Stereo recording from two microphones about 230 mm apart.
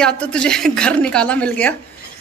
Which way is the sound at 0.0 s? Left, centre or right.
Centre.